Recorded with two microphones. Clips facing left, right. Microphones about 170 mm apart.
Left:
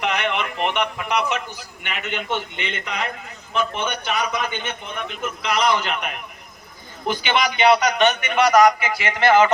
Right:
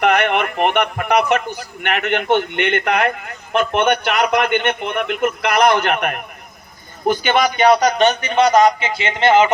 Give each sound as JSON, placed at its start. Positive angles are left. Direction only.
{"t": 0.0, "sound": "a man's voice", "side_deg": -60}